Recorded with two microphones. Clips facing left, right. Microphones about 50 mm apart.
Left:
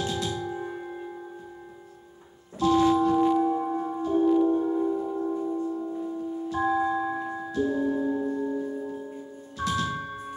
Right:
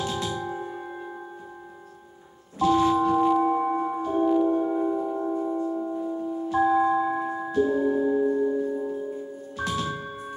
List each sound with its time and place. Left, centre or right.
0.1 s music: centre
2.6 s a sound: centre
3.4 s music: right
4.5 s singing bowl: right
8.7 s music: centre